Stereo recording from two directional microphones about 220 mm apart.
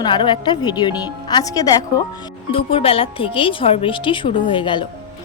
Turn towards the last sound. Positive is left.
turn(degrees=20)  # may be behind; listen again after turning